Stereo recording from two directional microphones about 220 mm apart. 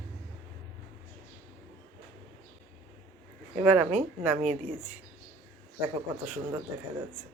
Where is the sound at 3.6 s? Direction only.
5° right (ahead or behind).